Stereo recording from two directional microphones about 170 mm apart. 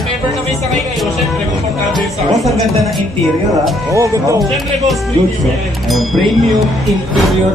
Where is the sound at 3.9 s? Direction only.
20° right (ahead or behind).